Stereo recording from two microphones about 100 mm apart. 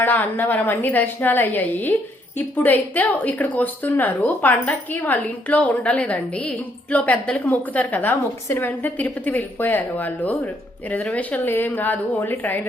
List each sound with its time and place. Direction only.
0.0 s speech: 20° left (ahead or behind)